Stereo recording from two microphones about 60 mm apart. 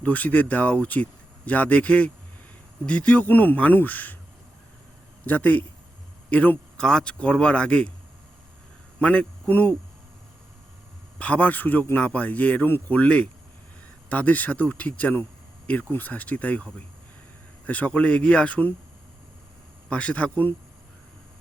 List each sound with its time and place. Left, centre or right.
0.0 s speech: left
5.2 s speech: left
6.7 s speech: centre
9.0 s a man's voice: centre
9.5 s speech: left
11.2 s speech: left
14.1 s speech: left
17.7 s speech: left
19.9 s speech: left